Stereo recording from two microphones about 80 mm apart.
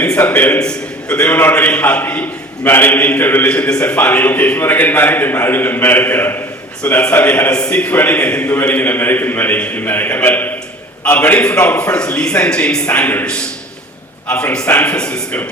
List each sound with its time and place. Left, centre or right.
0.2 s a man's voice: left
0.6 s a man's voice: centre
14.3 s a man's voice: centre